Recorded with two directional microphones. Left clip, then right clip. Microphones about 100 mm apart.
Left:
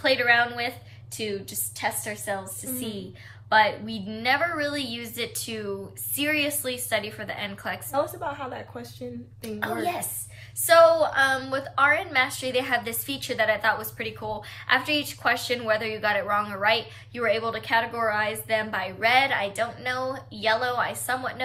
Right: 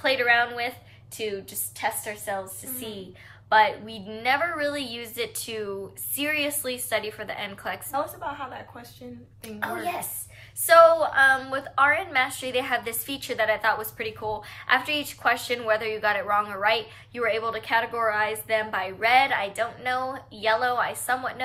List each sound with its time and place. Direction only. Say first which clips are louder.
0.0 s a woman's voice: left 1 dB; 40° right (ahead or behind)
7.9 s a woman's voice: left 3 dB; 5° left (ahead or behind)
9.4 s a woman's voice: left 2 dB; 30° right (ahead or behind)